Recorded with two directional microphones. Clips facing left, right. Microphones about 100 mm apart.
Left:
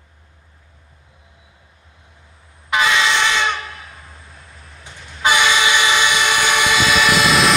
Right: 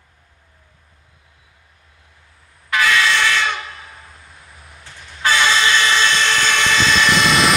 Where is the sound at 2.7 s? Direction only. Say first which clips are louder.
Even; 20° left (ahead or behind).